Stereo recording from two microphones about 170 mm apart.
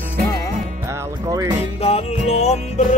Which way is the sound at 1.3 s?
20° right (ahead or behind).